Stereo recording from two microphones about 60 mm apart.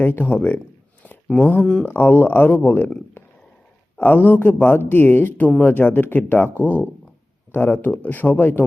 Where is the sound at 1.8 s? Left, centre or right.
Left.